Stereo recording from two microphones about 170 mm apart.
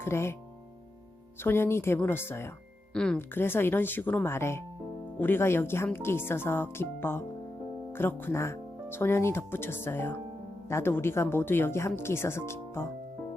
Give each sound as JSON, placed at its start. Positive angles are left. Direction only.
{"t": 0.0, "sound": "speech", "side_deg": 15}
{"t": 1.5, "sound": "speech", "side_deg": 15}